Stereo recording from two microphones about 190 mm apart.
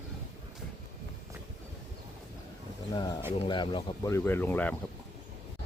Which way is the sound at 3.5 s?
25° left (ahead or behind).